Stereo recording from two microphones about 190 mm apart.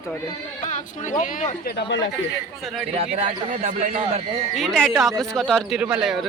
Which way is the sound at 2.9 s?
35° right (ahead or behind).